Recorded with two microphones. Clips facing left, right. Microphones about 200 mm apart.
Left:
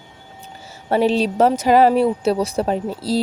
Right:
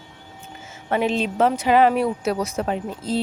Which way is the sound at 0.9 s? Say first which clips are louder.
Left 5 dB; 35° left (ahead or behind).